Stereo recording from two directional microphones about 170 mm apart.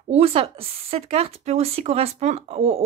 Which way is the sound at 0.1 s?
35° right (ahead or behind).